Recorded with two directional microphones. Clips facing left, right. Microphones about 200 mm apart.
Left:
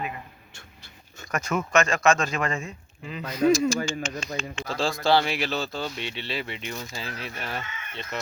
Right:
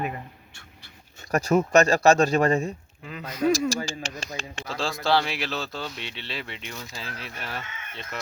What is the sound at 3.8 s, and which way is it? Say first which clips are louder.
Speech: left 3 dB; 30° right (ahead or behind).